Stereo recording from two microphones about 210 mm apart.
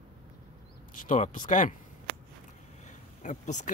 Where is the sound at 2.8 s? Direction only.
35° left (ahead or behind).